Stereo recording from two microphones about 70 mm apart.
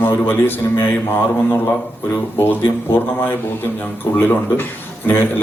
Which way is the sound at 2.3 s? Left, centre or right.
Left.